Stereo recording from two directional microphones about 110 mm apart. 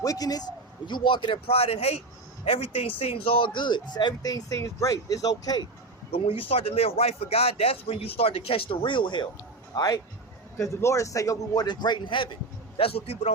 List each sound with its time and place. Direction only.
0.0 s speech: 35° left (ahead or behind)
0.9 s speech: 50° left (ahead or behind)
6.1 s speech: 55° left (ahead or behind)
9.7 s speech: 35° left (ahead or behind); by 13.3 s 65° left (ahead or behind)